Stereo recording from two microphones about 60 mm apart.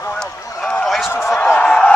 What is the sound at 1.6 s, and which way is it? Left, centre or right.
Speech, centre.